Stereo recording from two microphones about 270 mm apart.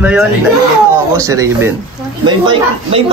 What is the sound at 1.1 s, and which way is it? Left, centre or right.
A woman's voice, centre.